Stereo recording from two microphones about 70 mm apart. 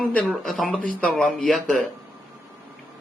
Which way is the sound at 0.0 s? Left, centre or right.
Centre.